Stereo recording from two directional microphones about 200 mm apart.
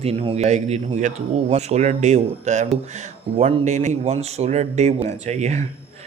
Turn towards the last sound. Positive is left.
turn(degrees=-35)  # may be behind; listen again after turning